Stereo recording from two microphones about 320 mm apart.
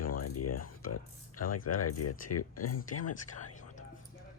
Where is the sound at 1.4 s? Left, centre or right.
Left.